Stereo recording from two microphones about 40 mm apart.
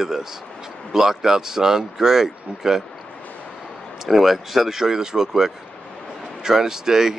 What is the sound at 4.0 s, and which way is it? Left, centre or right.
Speech, centre.